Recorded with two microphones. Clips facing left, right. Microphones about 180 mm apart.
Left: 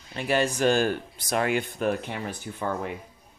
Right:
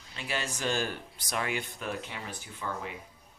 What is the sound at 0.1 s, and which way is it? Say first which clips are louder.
Speech: left 11 dB; 55° left (ahead or behind).